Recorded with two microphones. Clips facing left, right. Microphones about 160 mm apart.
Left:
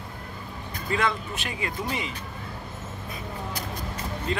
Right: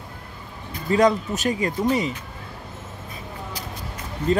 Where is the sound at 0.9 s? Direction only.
40° right (ahead or behind).